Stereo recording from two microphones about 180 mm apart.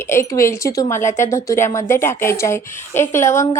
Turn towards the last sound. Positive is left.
turn(degrees=15)  # may be behind; listen again after turning